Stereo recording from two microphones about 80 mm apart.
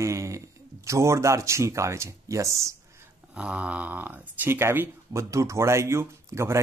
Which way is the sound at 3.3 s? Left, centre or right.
Centre.